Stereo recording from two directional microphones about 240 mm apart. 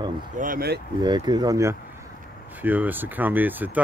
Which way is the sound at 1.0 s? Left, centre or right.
Centre.